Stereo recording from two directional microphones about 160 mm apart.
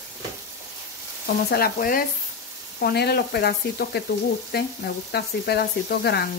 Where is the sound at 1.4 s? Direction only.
70° left (ahead or behind).